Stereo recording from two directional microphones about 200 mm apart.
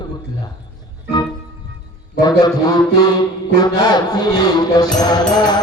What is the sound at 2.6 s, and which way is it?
Speech, 20° left (ahead or behind).